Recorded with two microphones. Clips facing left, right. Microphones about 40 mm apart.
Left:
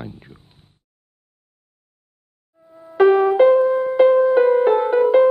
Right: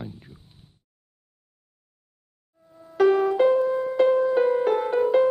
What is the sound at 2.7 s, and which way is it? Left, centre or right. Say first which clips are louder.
Music: left 5 dB; left.